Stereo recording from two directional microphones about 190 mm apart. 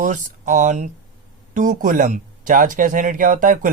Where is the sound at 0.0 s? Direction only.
40° right (ahead or behind).